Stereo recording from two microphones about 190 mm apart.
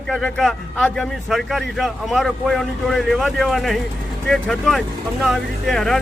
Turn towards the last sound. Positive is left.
turn(degrees=0)  # may be behind; listen again after turning